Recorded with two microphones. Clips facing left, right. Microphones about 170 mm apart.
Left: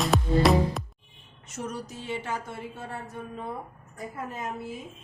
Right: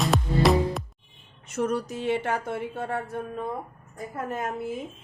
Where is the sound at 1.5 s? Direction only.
60° right (ahead or behind).